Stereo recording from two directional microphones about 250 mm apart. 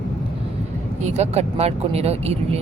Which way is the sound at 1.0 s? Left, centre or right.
Right.